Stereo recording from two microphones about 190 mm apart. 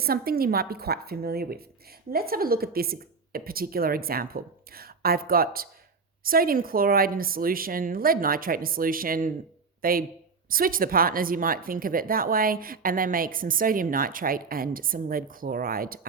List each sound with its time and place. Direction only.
0.0 s a woman's voice: 55° right (ahead or behind)